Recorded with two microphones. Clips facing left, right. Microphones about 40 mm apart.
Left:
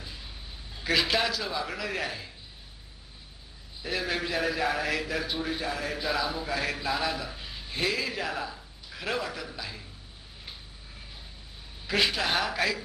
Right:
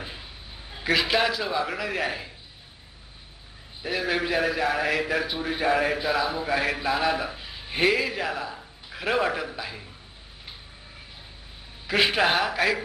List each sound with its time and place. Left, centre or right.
0.2 s a sound: centre
0.6 s a sound: right
0.9 s a man's voice: centre
3.8 s a man's voice: centre
5.5 s a man's voice: right
6.0 s a man's voice: centre
7.3 s a sound: centre
7.6 s music: right
7.9 s a man's voice: centre
8.5 s a sound: centre
9.2 s a man's voice: right
9.5 s a man's voice: centre
12.0 s a man's voice: right
12.4 s a man's voice: centre